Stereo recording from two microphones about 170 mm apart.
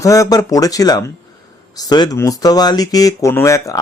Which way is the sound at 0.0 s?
20° left (ahead or behind).